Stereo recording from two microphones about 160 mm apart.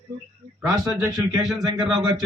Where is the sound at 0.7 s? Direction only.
25° right (ahead or behind).